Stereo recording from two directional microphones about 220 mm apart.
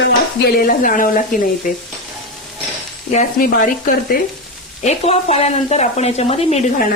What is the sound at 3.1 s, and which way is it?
Speech, 35° left (ahead or behind).